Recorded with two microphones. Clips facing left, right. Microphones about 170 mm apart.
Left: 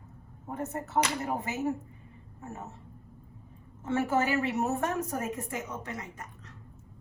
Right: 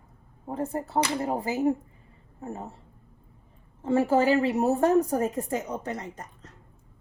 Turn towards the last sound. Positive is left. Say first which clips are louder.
# right 4 dB
turn(degrees=-35)  # may be behind; listen again after turning